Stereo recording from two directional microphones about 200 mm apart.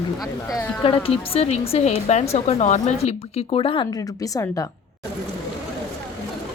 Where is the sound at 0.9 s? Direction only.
30° left (ahead or behind).